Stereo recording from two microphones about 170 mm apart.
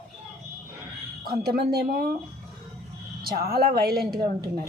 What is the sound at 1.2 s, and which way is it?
Speech, 65° right (ahead or behind).